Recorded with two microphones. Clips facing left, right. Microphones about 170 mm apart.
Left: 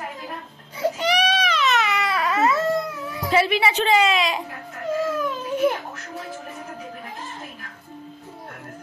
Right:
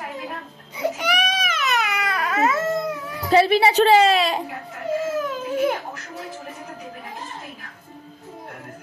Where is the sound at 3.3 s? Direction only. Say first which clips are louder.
Right 4 dB; 35° right (ahead or behind).